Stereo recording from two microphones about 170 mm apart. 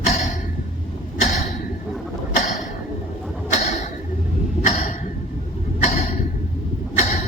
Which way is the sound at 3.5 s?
45° left (ahead or behind).